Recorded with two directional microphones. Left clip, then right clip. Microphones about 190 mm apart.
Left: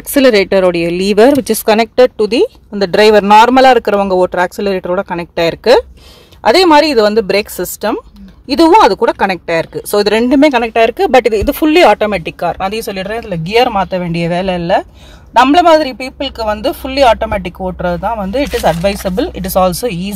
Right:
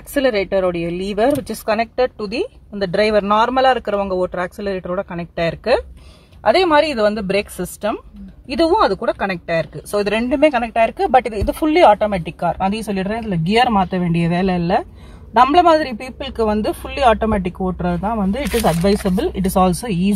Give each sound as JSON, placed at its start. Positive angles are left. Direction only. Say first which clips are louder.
{"t": 0.1, "sound": "speech", "louder": "left 8 dB", "side_deg": 50}